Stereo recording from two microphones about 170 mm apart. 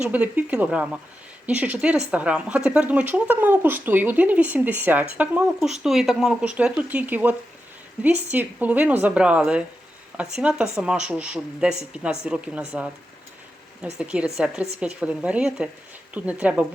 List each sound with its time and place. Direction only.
0.0 s a woman's voice: 10° right (ahead or behind)
14.0 s a woman's voice: 5° right (ahead or behind)